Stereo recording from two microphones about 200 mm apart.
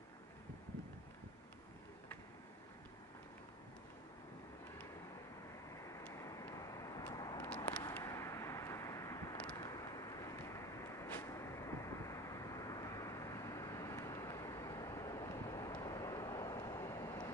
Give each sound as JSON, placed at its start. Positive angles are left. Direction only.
{"t": 5.9, "sound": "vehicle", "side_deg": 15}